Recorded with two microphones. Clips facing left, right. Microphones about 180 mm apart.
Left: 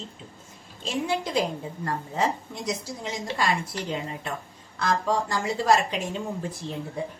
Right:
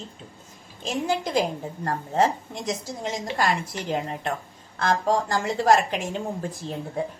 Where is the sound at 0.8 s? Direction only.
45° right (ahead or behind).